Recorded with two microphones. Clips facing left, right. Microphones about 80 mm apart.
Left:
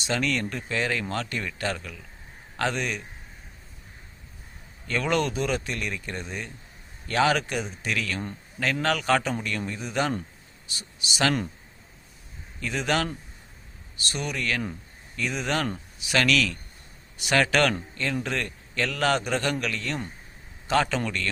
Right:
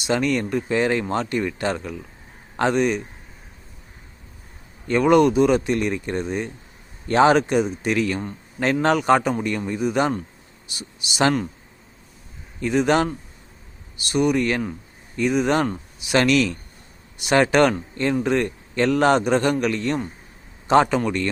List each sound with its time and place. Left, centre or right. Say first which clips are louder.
0.1 s a man's voice: right 6 dB; centre
4.9 s a man's voice: right 10 dB; right
12.5 s a man's voice: right 8 dB; right
14.1 s a man's voice: right 10 dB; centre